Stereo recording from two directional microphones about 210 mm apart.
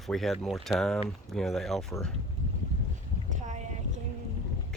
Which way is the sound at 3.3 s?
35° right (ahead or behind).